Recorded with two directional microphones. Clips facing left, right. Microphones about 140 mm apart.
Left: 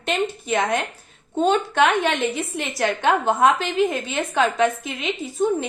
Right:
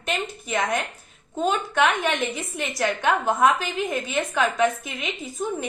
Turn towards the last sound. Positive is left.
turn(degrees=30)  # may be behind; listen again after turning